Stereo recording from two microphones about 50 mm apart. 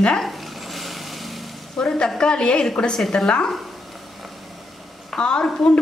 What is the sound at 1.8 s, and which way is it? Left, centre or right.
A woman's voice, centre.